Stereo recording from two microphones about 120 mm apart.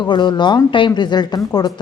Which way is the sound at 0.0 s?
40° left (ahead or behind).